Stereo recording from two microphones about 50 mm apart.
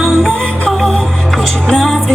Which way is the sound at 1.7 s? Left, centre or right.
Centre.